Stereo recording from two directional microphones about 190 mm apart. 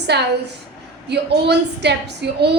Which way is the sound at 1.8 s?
60° right (ahead or behind).